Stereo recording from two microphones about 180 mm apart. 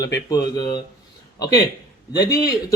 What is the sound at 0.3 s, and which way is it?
Speech, 20° left (ahead or behind).